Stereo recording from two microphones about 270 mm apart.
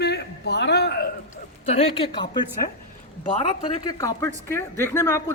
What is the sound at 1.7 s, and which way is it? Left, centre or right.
Speech, left.